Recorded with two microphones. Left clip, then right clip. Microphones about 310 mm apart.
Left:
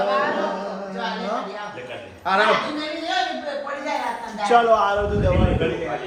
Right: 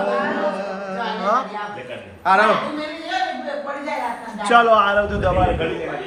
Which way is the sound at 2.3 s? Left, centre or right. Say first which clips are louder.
Right 5 dB; right.